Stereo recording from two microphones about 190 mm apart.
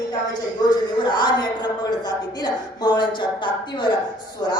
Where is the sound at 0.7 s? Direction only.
25° left (ahead or behind).